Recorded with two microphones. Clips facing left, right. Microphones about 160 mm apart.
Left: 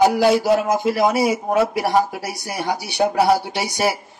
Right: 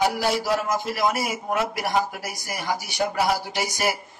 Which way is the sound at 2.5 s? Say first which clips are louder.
Left 4 dB; 65° left (ahead or behind).